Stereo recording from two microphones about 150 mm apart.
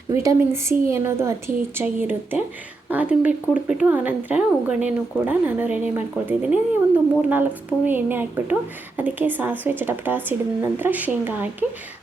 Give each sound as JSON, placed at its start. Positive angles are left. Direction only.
{"t": 0.1, "sound": "speech", "side_deg": -20}